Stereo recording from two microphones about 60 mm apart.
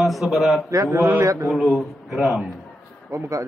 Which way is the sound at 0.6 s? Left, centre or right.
Right.